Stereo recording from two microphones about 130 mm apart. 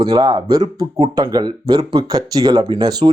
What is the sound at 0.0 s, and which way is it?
Speech, 35° right (ahead or behind).